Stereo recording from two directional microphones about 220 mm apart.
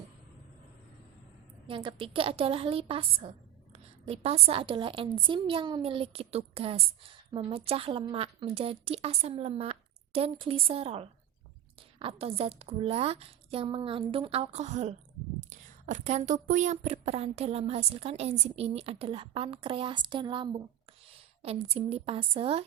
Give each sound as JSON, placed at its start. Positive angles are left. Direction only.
{"t": 1.6, "sound": "a woman's voice", "side_deg": -25}